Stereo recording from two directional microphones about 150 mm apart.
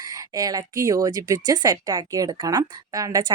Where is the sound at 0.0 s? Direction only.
25° right (ahead or behind).